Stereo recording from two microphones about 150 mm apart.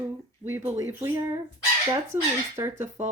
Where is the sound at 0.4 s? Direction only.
15° right (ahead or behind).